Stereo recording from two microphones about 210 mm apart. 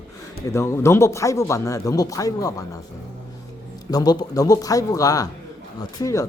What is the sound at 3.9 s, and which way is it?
Speech, 20° left (ahead or behind).